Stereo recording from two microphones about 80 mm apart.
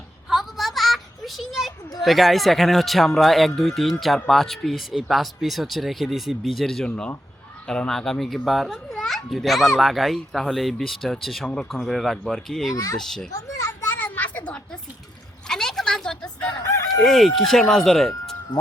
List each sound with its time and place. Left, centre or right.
0.3 s a sound: centre
2.0 s a child's voice: centre
11.4 s speech: centre
11.7 s a child's voice: centre
12.7 s speech: left
13.0 s a child's voice: centre
13.3 s children playing: left
14.0 s a sound: left
17.0 s a child's voice: centre